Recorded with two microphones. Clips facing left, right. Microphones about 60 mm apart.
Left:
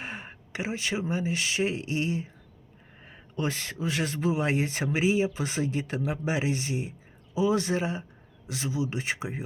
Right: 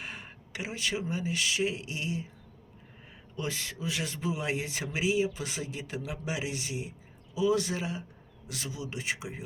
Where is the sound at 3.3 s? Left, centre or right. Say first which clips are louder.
Left 5 dB; left.